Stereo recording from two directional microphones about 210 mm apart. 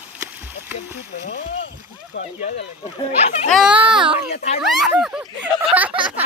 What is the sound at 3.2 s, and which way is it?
Speech, 30° left (ahead or behind).